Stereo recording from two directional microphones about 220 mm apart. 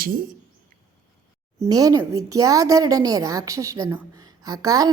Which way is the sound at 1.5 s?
15° right (ahead or behind).